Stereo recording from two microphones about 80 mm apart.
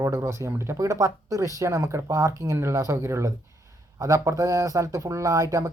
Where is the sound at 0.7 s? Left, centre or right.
Right.